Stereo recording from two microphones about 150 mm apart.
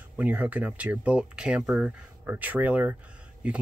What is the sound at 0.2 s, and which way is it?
Speech, 10° right (ahead or behind).